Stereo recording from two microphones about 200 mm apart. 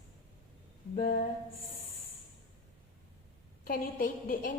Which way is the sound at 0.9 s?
45° left (ahead or behind).